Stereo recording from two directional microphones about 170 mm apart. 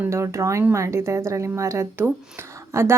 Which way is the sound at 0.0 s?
15° right (ahead or behind).